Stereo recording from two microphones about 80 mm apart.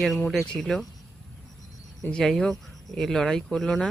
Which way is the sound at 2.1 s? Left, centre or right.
Centre.